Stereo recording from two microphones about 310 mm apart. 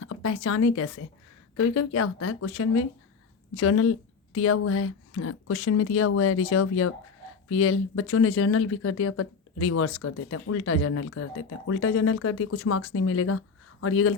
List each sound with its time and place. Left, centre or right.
0.0 s speech: left